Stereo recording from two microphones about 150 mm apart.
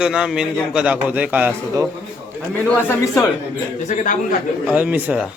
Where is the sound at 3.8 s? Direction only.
60° left (ahead or behind).